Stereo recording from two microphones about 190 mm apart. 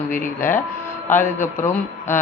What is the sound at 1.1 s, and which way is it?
Speech, 10° left (ahead or behind).